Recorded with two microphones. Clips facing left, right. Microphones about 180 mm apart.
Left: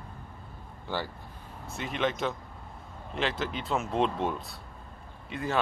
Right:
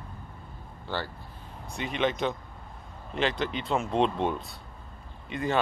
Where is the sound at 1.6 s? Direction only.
Centre (ahead or behind).